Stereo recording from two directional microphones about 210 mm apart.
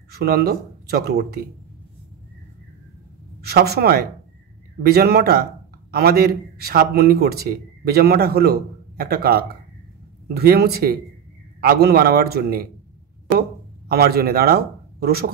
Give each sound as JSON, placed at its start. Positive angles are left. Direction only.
{"t": 0.1, "sound": "speech", "side_deg": -50}
{"t": 3.3, "sound": "a woman's voice", "side_deg": -50}